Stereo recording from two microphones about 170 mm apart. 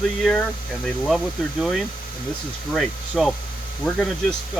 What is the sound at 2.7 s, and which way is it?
Speech, centre (ahead or behind).